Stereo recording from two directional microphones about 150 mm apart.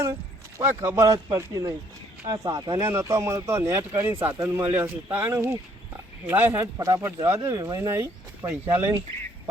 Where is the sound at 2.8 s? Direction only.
15° right (ahead or behind).